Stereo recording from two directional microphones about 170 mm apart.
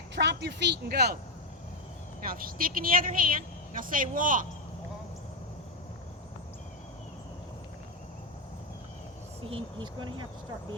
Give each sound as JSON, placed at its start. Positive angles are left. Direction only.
{"t": 0.2, "sound": "a woman's voice", "side_deg": -90}
{"t": 2.2, "sound": "a woman's voice", "side_deg": -55}
{"t": 9.5, "sound": "speech", "side_deg": -25}